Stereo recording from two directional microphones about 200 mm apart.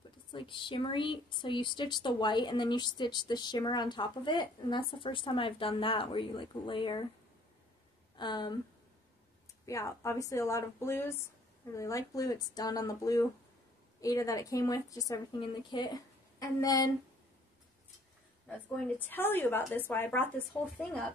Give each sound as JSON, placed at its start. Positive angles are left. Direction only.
{"t": 0.3, "sound": "a woman's voice", "side_deg": 25}
{"t": 8.2, "sound": "a woman's voice", "side_deg": 20}
{"t": 9.7, "sound": "a woman's voice", "side_deg": 15}
{"t": 18.9, "sound": "speech", "side_deg": 10}